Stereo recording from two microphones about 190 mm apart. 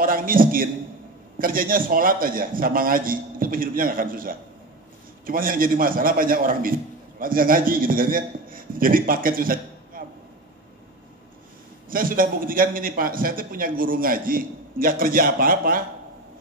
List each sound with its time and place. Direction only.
0.0 s a man's voice: 50° right (ahead or behind)
11.9 s a man's voice: 50° right (ahead or behind)